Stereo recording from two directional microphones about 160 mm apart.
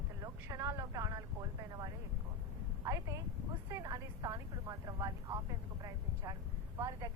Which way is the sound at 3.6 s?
20° right (ahead or behind).